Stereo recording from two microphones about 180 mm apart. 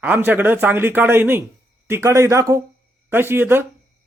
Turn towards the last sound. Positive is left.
turn(degrees=-10)  # may be behind; listen again after turning